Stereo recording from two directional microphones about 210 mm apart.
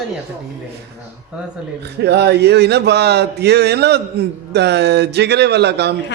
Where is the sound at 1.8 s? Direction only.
55° right (ahead or behind).